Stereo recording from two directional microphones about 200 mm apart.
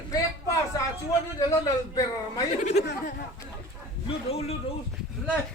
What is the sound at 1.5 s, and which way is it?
Speech, 15° left (ahead or behind).